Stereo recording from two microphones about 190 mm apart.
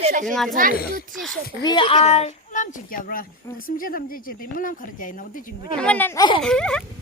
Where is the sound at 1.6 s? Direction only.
25° left (ahead or behind); by 5.4 s 45° left (ahead or behind).